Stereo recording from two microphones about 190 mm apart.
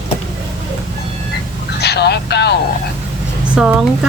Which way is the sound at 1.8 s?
60° left (ahead or behind).